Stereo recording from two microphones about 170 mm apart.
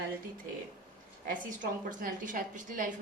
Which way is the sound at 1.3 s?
55° right (ahead or behind).